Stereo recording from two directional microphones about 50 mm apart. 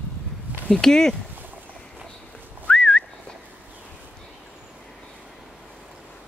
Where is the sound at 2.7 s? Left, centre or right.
Centre.